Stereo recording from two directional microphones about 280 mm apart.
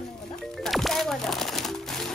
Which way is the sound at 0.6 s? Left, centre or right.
Centre.